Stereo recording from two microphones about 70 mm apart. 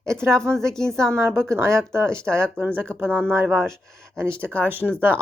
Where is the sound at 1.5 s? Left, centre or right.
Right.